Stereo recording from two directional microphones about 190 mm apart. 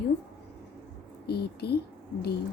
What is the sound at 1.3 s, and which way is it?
Speech, 60° left (ahead or behind).